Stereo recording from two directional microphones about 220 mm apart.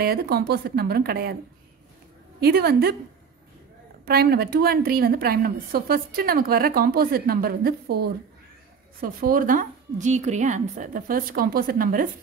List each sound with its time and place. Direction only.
0.0 s a woman's voice: 45° right (ahead or behind)
2.4 s a woman's voice: 45° right (ahead or behind)
4.0 s a woman's voice: 45° right (ahead or behind)